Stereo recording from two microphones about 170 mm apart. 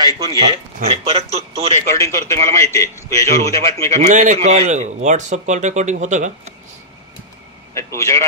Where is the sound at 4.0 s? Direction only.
45° right (ahead or behind).